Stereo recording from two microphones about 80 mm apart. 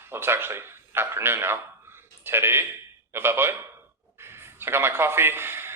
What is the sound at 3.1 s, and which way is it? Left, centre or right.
Speech, right.